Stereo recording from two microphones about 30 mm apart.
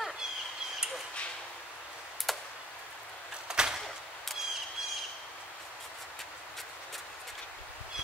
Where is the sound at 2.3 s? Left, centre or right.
Centre.